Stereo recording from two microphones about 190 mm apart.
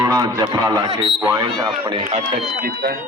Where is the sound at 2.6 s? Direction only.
50° right (ahead or behind).